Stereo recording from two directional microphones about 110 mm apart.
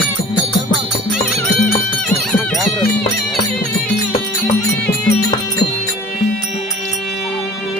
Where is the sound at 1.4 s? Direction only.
10° left (ahead or behind).